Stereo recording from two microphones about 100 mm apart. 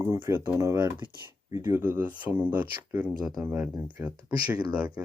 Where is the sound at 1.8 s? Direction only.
20° right (ahead or behind).